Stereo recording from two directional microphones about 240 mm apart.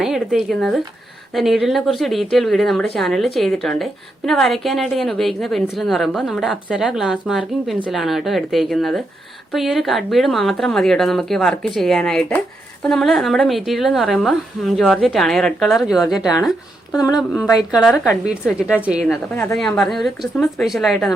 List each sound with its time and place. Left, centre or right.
0.0 s a woman's voice: centre
17.0 s speech: centre
17.7 s a woman's voice: centre